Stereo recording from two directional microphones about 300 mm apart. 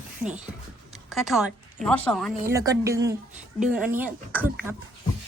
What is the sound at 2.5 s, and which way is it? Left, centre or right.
Speech, centre.